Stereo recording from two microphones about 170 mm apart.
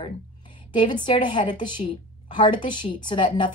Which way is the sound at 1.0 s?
25° left (ahead or behind).